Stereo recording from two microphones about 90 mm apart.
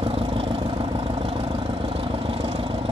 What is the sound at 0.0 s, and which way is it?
Vehicle, 90° right.